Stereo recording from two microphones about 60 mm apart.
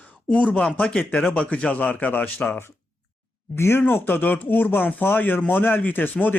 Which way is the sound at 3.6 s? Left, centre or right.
Left.